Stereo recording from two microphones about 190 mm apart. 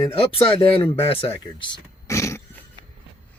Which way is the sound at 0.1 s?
30° left (ahead or behind).